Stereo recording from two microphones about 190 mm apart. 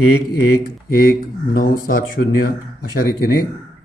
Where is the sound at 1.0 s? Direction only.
45° left (ahead or behind).